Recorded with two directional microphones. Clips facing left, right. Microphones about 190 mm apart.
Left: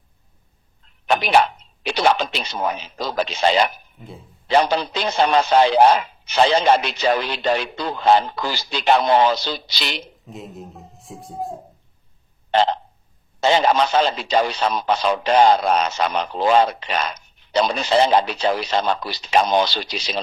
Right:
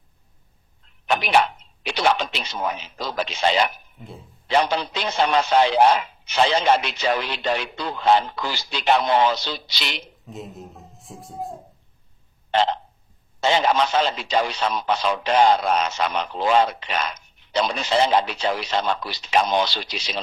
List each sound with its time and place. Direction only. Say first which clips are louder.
1.0 s speech: left 3 dB; 35° left (ahead or behind)
4.0 s speech: left 1 dB; centre (ahead or behind)
4.5 s speech: left 3 dB; 35° left (ahead or behind)
10.2 s speech: left 1 dB; centre (ahead or behind)
12.5 s speech: left 3 dB; 35° left (ahead or behind)